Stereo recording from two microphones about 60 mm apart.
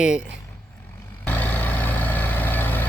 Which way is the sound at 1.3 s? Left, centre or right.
Left.